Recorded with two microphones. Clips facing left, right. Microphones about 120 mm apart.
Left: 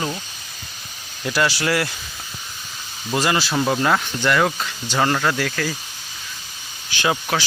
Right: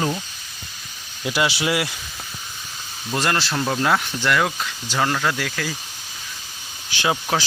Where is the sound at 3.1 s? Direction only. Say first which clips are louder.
Left 2 dB; 5° left (ahead or behind).